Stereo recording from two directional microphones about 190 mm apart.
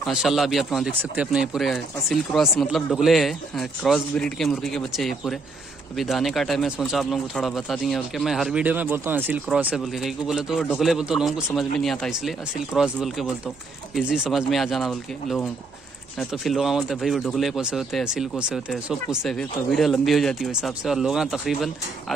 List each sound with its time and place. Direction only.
0.0 s speech: centre (ahead or behind)